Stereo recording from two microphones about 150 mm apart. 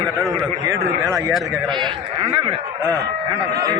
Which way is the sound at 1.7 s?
30° right (ahead or behind).